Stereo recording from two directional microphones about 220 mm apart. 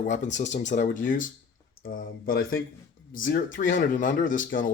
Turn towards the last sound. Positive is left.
turn(degrees=35)  # may be behind; listen again after turning